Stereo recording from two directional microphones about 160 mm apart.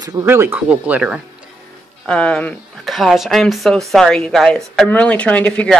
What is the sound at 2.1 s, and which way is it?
Speech, 5° left (ahead or behind).